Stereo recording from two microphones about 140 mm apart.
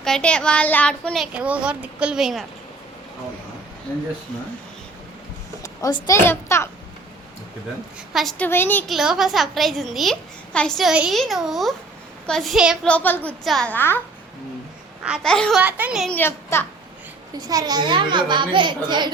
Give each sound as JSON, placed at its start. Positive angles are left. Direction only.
{"t": 0.0, "sound": "a child's voice", "side_deg": 5}
{"t": 1.3, "sound": "a woman's voice", "side_deg": -10}
{"t": 5.6, "sound": "a woman's voice", "side_deg": 25}
{"t": 8.1, "sound": "a woman's voice", "side_deg": 0}
{"t": 8.4, "sound": "a child's voice", "side_deg": 15}
{"t": 8.9, "sound": "a woman's voice", "side_deg": 0}
{"t": 12.9, "sound": "a child's voice", "side_deg": 10}
{"t": 13.4, "sound": "a woman's voice", "side_deg": 0}
{"t": 13.7, "sound": "a child's voice", "side_deg": 15}
{"t": 15.2, "sound": "a woman's voice", "side_deg": 5}
{"t": 15.5, "sound": "a woman's voice", "side_deg": -10}
{"t": 16.0, "sound": "a child's voice", "side_deg": 10}
{"t": 17.5, "sound": "a child's voice", "side_deg": -25}